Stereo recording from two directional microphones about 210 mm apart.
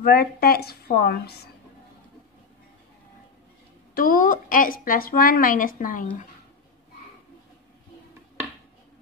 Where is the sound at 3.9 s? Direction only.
40° left (ahead or behind).